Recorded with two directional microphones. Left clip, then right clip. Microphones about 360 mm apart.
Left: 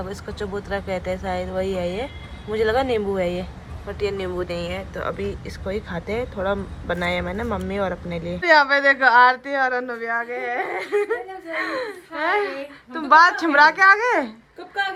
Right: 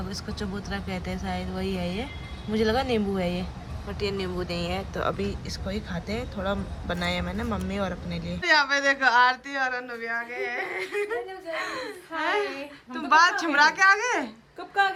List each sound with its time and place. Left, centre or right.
0.1 s speech: centre